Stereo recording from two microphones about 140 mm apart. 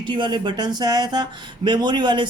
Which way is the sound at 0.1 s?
35° right (ahead or behind).